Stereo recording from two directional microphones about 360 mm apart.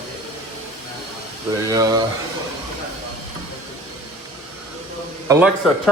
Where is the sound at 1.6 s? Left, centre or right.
Centre.